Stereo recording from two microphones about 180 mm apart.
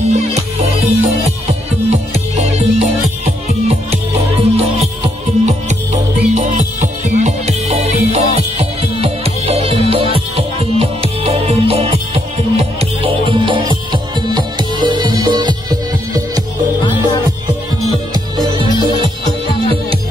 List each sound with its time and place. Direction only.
0.1 s music: 35° right (ahead or behind)
18.1 s music: 25° right (ahead or behind)